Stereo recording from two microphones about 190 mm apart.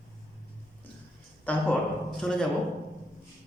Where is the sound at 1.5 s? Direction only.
10° left (ahead or behind).